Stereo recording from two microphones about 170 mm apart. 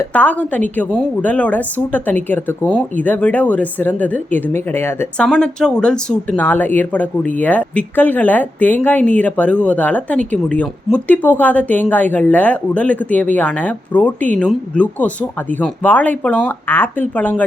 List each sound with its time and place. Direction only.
0.0 s speech: 10° left (ahead or behind)